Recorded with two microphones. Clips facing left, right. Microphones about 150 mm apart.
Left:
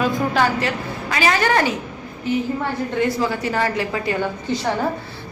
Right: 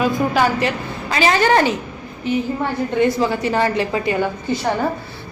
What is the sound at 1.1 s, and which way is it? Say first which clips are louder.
Speech: right 3 dB; 30° right (ahead or behind).